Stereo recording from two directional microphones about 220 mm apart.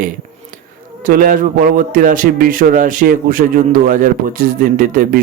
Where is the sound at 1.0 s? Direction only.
40° right (ahead or behind).